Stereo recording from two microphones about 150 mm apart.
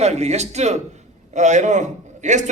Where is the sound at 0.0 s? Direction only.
45° right (ahead or behind).